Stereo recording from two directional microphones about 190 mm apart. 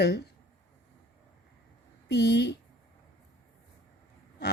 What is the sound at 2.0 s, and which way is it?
Speech, 60° left (ahead or behind).